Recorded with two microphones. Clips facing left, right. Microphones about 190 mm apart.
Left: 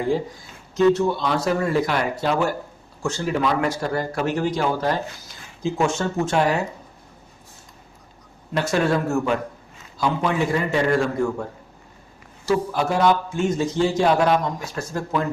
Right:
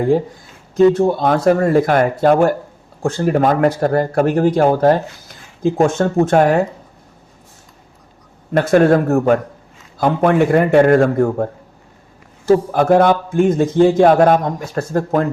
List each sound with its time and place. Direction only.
0.9 s a man's voice: 50° right (ahead or behind)
8.5 s a man's voice: 55° right (ahead or behind)
12.5 s a man's voice: 55° right (ahead or behind)